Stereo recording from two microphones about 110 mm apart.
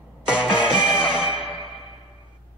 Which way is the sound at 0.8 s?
50° left (ahead or behind).